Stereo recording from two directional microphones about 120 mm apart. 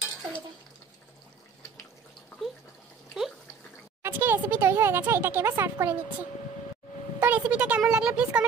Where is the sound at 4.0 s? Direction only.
15° right (ahead or behind).